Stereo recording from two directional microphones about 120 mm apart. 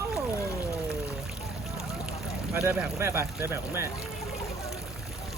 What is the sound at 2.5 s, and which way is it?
Speech, 10° right (ahead or behind).